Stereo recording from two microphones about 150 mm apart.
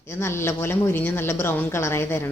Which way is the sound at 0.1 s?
15° left (ahead or behind).